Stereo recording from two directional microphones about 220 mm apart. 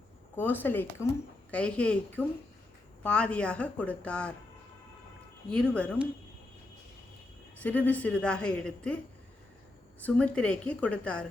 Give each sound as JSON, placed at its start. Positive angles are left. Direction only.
{"t": 0.3, "sound": "a woman's voice", "side_deg": 10}
{"t": 5.5, "sound": "a woman's voice", "side_deg": 5}
{"t": 7.6, "sound": "a woman's voice", "side_deg": 5}
{"t": 10.0, "sound": "a woman's voice", "side_deg": 5}